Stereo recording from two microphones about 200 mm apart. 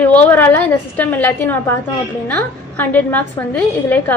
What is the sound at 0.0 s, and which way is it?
A woman's voice, 10° left (ahead or behind).